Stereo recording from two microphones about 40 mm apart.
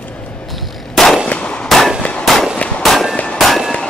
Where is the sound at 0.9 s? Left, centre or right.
Centre.